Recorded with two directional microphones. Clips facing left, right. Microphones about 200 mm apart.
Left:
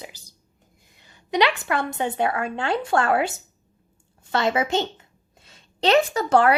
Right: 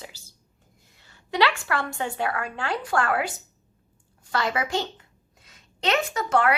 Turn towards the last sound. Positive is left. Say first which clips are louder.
# left 5 dB
turn(degrees=35)  # may be behind; listen again after turning